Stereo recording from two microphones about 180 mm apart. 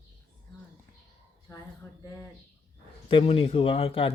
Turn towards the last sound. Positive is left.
turn(degrees=30)  # may be behind; listen again after turning